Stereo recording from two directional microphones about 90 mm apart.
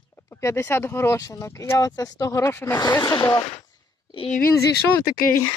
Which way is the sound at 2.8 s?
45° left (ahead or behind).